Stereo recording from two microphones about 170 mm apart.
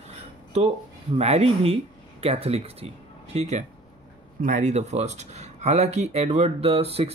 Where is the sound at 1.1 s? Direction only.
35° right (ahead or behind).